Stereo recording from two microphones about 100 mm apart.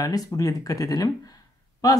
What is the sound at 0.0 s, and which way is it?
Speech, 35° left (ahead or behind).